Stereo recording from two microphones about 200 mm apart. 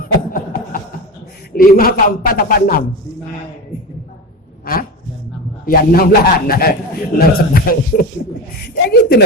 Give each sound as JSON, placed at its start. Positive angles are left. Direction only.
{"t": 0.0, "sound": "music", "side_deg": 45}
{"t": 1.5, "sound": "speech", "side_deg": 45}
{"t": 4.6, "sound": "speech", "side_deg": 45}